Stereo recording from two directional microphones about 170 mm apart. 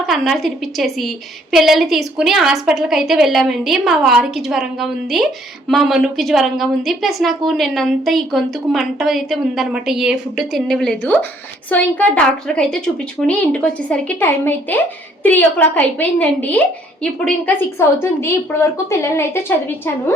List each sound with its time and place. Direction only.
0.1 s a woman's voice: centre (ahead or behind)